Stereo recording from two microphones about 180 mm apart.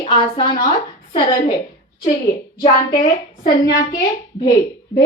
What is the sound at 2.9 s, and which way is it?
Speech, 25° left (ahead or behind).